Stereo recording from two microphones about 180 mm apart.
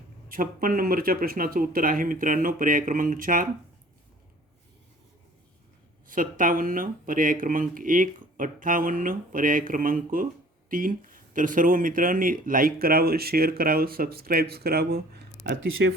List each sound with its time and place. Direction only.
0.3 s speech: 50° right (ahead or behind)
6.1 s speech: 50° right (ahead or behind)
15.8 s speech: 85° right